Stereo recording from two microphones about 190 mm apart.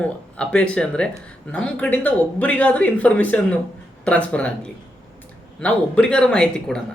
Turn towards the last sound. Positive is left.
turn(degrees=5)  # may be behind; listen again after turning